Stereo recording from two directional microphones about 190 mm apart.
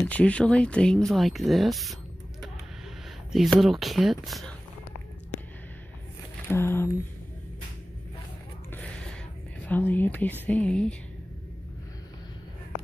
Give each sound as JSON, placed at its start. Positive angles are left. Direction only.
{"t": 0.0, "sound": "speech", "side_deg": 5}
{"t": 3.3, "sound": "speech", "side_deg": 0}
{"t": 6.4, "sound": "a sound", "side_deg": 10}
{"t": 9.7, "sound": "speech", "side_deg": 10}